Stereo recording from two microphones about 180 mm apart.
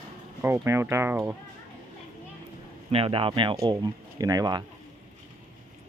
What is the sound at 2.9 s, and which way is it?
Speech, 30° right (ahead or behind).